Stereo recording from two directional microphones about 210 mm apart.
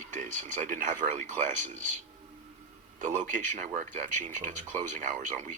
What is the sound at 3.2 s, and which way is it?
Speech, 35° right (ahead or behind).